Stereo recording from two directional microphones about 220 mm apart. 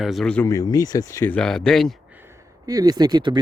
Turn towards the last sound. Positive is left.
turn(degrees=-20)  # may be behind; listen again after turning